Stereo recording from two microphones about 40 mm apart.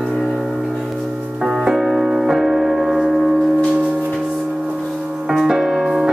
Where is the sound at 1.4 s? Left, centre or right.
Centre.